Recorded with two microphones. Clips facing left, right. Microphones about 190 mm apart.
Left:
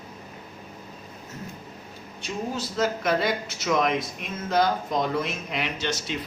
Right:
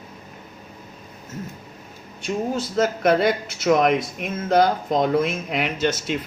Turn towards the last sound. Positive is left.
turn(degrees=-50)  # may be behind; listen again after turning